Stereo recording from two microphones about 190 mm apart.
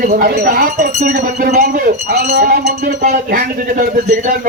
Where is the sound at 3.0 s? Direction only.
45° right (ahead or behind).